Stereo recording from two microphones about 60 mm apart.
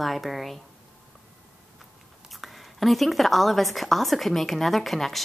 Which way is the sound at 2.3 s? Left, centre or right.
Centre.